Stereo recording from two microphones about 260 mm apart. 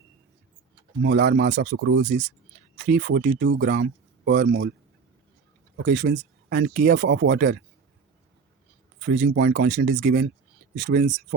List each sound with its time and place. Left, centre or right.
1.0 s speech: right
1.8 s speech: right
5.7 s speech: right
9.0 s speech: right